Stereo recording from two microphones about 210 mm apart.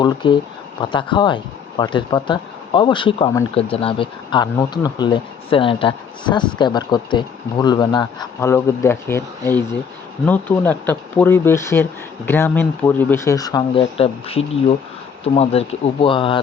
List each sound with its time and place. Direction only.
0.0 s speech: 20° left (ahead or behind)